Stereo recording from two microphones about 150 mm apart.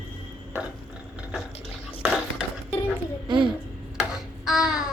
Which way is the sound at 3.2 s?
35° right (ahead or behind).